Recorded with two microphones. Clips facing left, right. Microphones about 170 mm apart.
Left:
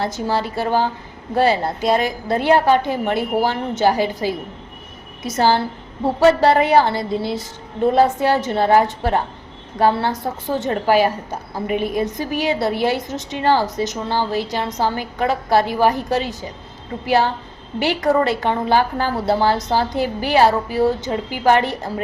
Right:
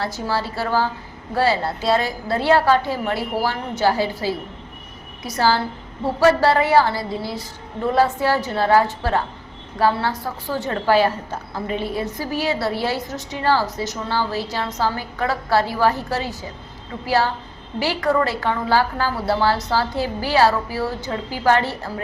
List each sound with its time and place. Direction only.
0.0 s a woman's voice: 20° left (ahead or behind)